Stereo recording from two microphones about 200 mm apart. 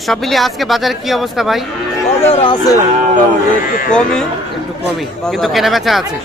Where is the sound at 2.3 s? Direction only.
25° left (ahead or behind).